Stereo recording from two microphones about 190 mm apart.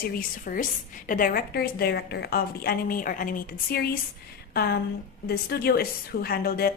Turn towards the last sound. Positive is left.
turn(degrees=55)  # may be behind; listen again after turning